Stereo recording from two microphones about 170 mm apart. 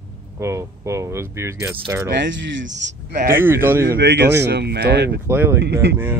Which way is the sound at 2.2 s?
90° right.